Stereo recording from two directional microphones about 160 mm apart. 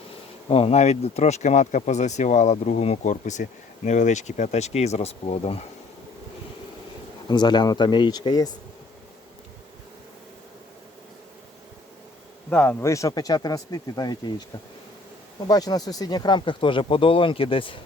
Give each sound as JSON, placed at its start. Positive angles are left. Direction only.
{"t": 0.5, "sound": "speech", "side_deg": 40}
{"t": 7.3, "sound": "speech", "side_deg": 30}
{"t": 12.5, "sound": "speech", "side_deg": 10}
{"t": 15.4, "sound": "speech", "side_deg": 25}